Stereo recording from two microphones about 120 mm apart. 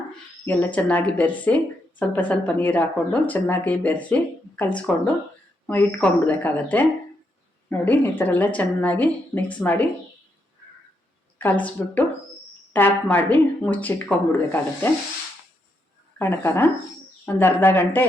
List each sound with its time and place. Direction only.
0.4 s speech: 15° left (ahead or behind)
11.3 s speech: 15° left (ahead or behind)
16.1 s speech: 15° left (ahead or behind)